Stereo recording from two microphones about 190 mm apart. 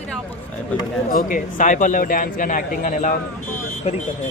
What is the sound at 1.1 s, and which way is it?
Speech, 45° left (ahead or behind).